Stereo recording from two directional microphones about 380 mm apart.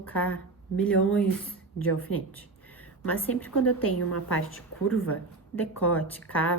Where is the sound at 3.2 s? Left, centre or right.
Centre.